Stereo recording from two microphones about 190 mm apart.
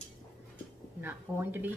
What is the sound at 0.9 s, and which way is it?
Speech, 10° right (ahead or behind).